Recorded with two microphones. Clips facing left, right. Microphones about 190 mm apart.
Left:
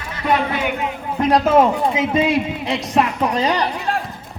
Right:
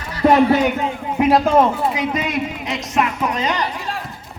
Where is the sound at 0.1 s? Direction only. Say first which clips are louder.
Right 7 dB; 40° right (ahead or behind).